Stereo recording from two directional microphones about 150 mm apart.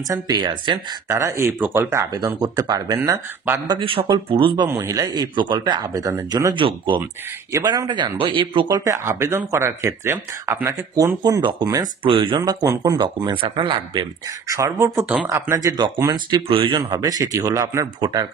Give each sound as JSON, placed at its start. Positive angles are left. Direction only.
{"t": 0.1, "sound": "speech", "side_deg": -30}
{"t": 3.0, "sound": "speech", "side_deg": -10}
{"t": 3.6, "sound": "speech", "side_deg": -35}
{"t": 4.6, "sound": "speech", "side_deg": -20}
{"t": 11.2, "sound": "speech", "side_deg": -25}
{"t": 14.5, "sound": "speech", "side_deg": -20}